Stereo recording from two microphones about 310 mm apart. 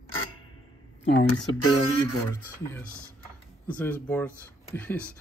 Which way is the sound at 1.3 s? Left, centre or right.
Left.